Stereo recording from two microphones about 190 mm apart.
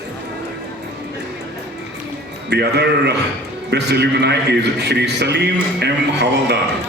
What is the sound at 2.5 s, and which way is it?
A man's voice, 60° right (ahead or behind).